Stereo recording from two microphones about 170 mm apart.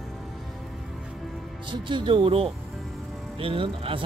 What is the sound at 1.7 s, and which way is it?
Speech, 30° right (ahead or behind).